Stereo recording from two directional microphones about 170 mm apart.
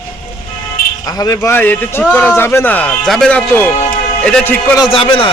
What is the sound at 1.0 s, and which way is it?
Speech, 20° left (ahead or behind).